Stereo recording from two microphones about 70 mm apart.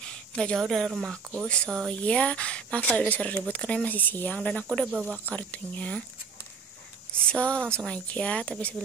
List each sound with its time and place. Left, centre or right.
0.0 s a sound: centre
0.6 s a woman's voice: centre
1.5 s speech: centre
7.2 s speech: centre